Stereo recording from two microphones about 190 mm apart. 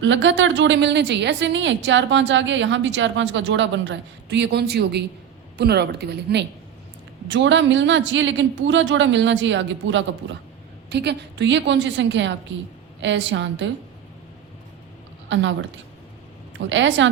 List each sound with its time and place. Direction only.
0.0 s a woman's voice: 75° right (ahead or behind)
10.8 s a woman's voice: 65° right (ahead or behind)
15.3 s a woman's voice: 75° right (ahead or behind)
16.6 s a woman's voice: 75° right (ahead or behind)